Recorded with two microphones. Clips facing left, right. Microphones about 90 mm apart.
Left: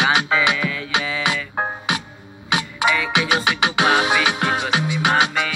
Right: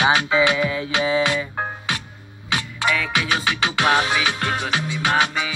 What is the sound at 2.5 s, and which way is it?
Music, 10° left (ahead or behind).